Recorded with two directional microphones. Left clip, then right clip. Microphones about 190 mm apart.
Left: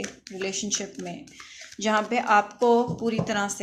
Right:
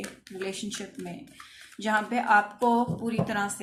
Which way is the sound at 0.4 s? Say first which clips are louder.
Left 6 dB; 30° left (ahead or behind).